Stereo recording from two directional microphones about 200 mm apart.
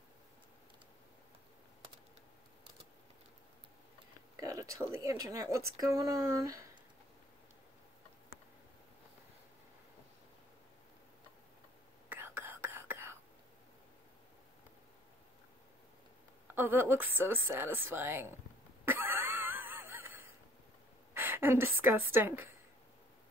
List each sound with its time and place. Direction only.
4.4 s a sound: 15° right (ahead or behind)
4.9 s speech: 15° right (ahead or behind)
12.1 s whispering: 10° right (ahead or behind)
16.5 s a woman's voice: 10° right (ahead or behind)
18.9 s wheeze: 10° right (ahead or behind)
21.1 s a sound: 10° right (ahead or behind)
22.1 s speech: 10° right (ahead or behind)